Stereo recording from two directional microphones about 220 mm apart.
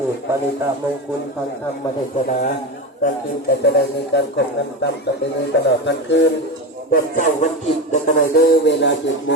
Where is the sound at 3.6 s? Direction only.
50° left (ahead or behind).